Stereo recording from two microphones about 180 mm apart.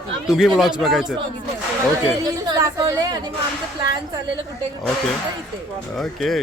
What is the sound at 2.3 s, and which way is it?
Speech, 20° right (ahead or behind).